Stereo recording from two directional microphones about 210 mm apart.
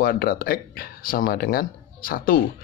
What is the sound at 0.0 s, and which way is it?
Speech, 45° left (ahead or behind).